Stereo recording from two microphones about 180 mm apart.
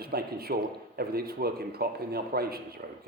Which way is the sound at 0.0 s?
60° right (ahead or behind).